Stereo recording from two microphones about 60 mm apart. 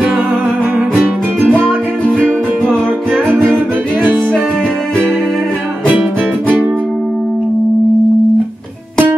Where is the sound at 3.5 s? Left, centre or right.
Right.